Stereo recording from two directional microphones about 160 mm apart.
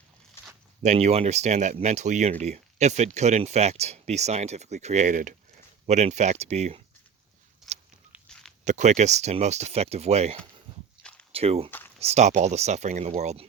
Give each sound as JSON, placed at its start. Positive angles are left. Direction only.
{"t": 0.8, "sound": "speech", "side_deg": -45}
{"t": 7.6, "sound": "a sound", "side_deg": 0}
{"t": 8.6, "sound": "speech", "side_deg": -50}